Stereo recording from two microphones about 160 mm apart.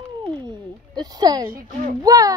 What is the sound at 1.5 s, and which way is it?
Speech, 55° right (ahead or behind).